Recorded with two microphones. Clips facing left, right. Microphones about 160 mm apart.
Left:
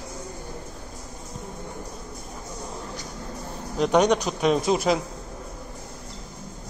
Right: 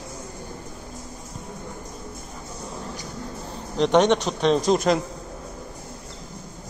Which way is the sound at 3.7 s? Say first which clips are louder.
Right 2 dB; 5° left (ahead or behind).